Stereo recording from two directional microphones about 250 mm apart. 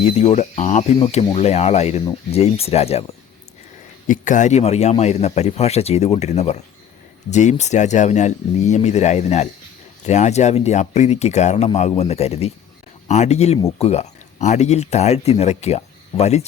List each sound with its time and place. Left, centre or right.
0.0 s speech: left
4.0 s speech: left